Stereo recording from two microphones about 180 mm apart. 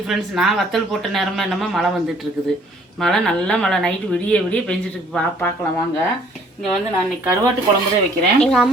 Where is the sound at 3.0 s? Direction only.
Centre (ahead or behind).